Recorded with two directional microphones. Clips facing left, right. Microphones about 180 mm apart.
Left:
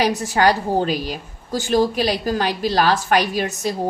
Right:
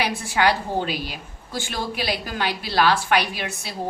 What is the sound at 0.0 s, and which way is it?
A woman's voice, 40° left (ahead or behind).